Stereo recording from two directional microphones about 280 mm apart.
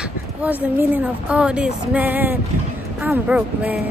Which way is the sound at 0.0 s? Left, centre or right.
Centre.